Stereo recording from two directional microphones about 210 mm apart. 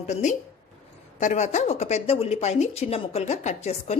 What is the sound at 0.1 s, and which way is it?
Speech, 35° left (ahead or behind).